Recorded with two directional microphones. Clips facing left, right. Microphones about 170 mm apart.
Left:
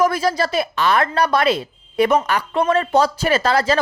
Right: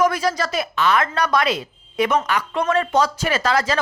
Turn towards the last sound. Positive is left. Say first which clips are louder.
# left 3 dB
turn(degrees=30)  # may be behind; listen again after turning